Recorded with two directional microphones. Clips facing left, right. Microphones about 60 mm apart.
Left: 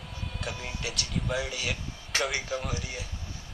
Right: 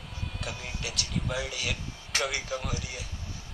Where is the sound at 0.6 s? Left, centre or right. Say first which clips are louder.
Left 1 dB; left.